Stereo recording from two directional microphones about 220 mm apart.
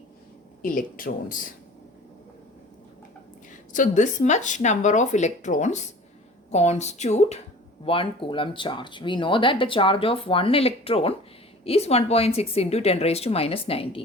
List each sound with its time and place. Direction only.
0.6 s speech: 40° left (ahead or behind)
3.7 s speech: 35° left (ahead or behind)